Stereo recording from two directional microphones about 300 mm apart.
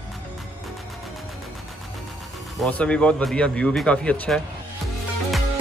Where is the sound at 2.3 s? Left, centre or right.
Centre.